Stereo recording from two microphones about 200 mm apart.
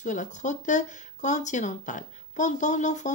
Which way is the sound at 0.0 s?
40° left (ahead or behind).